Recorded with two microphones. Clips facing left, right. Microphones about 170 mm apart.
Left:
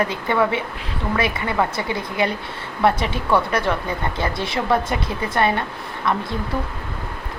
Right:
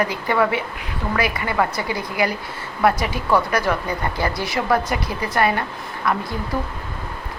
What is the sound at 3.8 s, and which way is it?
A woman's voice, 25° left (ahead or behind).